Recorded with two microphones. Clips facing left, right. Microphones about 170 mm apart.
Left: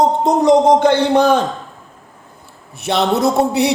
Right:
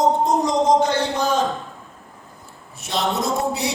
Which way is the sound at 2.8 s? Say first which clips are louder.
Left 8 dB; 65° left (ahead or behind).